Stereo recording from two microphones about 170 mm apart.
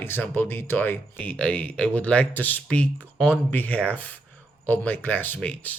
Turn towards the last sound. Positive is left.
turn(degrees=10)  # may be behind; listen again after turning